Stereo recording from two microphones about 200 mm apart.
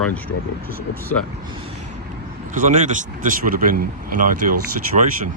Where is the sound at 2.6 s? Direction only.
40° right (ahead or behind).